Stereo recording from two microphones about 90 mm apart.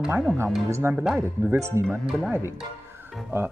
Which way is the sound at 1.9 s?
5° right (ahead or behind).